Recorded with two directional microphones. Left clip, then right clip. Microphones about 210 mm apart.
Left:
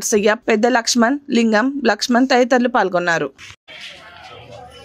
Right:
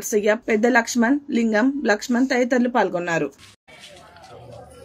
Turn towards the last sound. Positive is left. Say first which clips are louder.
# left 5 dB
turn(degrees=45)  # may be behind; listen again after turning